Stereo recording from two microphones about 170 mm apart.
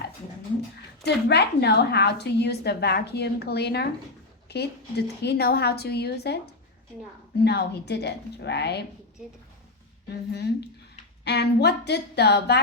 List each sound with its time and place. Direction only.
1.0 s a woman's voice: 80° left
10.3 s a woman's voice: 75° left (ahead or behind)